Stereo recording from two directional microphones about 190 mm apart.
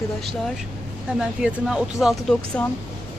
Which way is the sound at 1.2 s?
5° right (ahead or behind).